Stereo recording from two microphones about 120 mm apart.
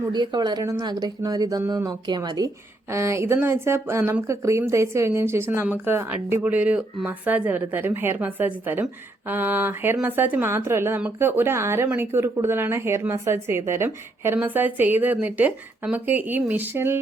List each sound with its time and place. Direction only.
0.1 s speech: 40° right (ahead or behind)
2.9 s a woman's voice: 25° right (ahead or behind)